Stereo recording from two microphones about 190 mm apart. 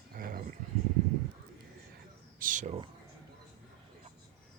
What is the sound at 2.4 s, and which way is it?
Speech, 45° right (ahead or behind).